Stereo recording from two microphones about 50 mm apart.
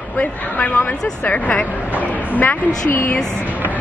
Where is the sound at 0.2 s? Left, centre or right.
Left.